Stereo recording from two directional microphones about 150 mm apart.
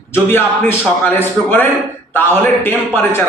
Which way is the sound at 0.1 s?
15° left (ahead or behind).